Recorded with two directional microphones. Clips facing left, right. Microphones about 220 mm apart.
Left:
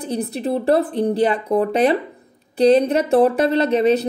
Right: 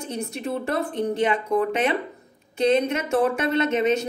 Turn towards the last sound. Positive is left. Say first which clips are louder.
# left 5 dB
turn(degrees=35)  # may be behind; listen again after turning